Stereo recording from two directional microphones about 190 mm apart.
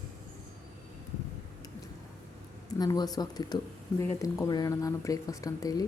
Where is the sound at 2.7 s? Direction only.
20° left (ahead or behind).